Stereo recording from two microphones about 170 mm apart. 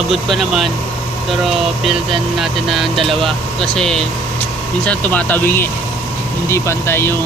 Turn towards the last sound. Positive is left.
turn(degrees=15)  # may be behind; listen again after turning